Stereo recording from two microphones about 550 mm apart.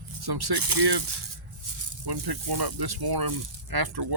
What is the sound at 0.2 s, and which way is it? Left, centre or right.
Speech, right.